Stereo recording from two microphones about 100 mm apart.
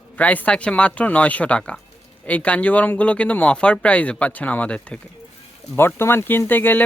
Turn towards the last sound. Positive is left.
turn(degrees=20)  # may be behind; listen again after turning